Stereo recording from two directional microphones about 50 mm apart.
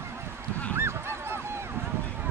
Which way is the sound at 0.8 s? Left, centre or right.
Right.